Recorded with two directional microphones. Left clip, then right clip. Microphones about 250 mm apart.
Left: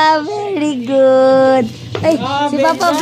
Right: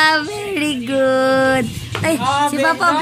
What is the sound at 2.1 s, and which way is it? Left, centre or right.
Speech, right.